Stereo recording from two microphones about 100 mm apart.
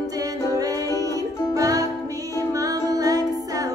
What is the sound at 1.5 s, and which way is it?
Music, 35° right (ahead or behind).